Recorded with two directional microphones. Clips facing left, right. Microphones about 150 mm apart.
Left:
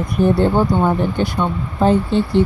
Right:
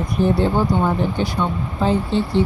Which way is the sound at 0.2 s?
50° left (ahead or behind).